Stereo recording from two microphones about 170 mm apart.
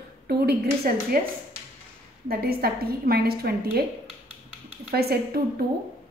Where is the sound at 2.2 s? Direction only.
65° right (ahead or behind).